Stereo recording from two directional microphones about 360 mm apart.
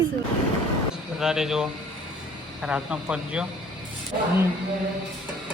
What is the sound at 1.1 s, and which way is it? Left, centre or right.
Cutlery, centre.